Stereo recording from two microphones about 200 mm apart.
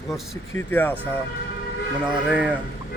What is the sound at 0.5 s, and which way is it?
Speech, 10° left (ahead or behind).